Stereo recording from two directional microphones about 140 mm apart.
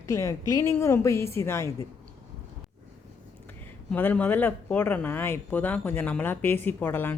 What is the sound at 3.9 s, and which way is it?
Speech, 10° left (ahead or behind).